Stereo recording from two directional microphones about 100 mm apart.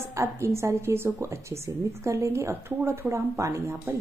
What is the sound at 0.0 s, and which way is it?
A woman's voice, 30° right (ahead or behind).